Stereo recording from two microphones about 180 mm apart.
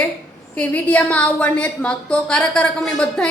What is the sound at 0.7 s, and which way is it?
A woman's voice, 10° left (ahead or behind).